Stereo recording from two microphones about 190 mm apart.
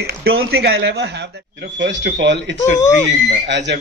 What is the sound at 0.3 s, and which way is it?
A man's voice, 75° right (ahead or behind).